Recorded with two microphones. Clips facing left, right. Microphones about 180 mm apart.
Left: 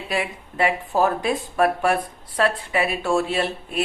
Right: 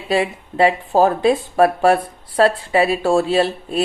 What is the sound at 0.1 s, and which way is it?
Speech, 30° right (ahead or behind).